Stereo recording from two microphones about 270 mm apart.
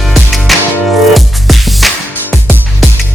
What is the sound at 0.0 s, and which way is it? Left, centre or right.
Music, centre.